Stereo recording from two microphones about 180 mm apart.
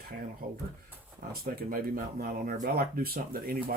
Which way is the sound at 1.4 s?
55° right (ahead or behind).